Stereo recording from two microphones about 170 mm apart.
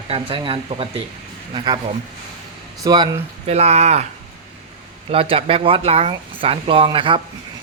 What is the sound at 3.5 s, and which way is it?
Speech, 40° right (ahead or behind).